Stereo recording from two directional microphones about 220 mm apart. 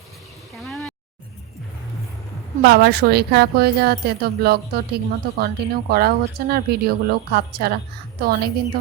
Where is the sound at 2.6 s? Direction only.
50° right (ahead or behind).